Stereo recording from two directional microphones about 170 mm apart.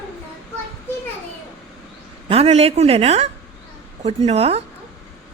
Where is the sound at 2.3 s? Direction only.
35° right (ahead or behind).